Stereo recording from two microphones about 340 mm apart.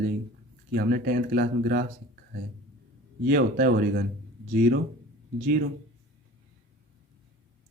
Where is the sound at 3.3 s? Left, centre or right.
Right.